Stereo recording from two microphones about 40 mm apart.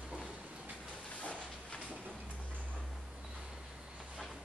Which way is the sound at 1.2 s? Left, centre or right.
Left.